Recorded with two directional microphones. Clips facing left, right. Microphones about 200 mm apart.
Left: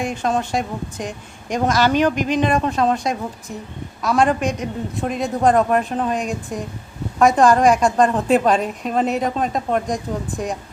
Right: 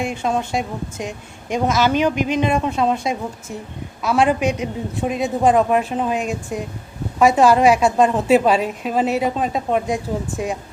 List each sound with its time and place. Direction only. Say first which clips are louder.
0.1 s a woman's voice: even; 10° right (ahead or behind)